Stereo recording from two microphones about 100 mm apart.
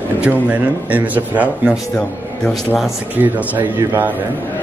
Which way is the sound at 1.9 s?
10° left (ahead or behind).